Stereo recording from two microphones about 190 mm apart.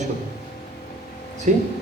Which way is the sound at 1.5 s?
40° right (ahead or behind).